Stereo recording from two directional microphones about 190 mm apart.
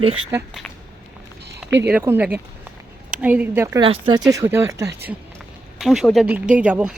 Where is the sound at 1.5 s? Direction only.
65° right (ahead or behind).